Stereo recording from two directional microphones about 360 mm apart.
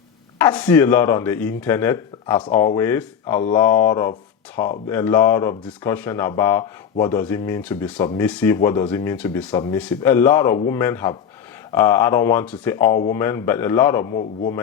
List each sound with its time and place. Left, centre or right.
0.3 s speech: centre